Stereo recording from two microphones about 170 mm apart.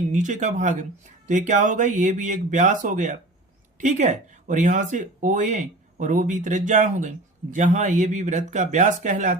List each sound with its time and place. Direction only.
0.1 s speech: 45° right (ahead or behind)